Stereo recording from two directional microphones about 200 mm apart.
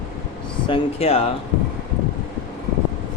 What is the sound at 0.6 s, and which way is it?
Speech, 30° left (ahead or behind).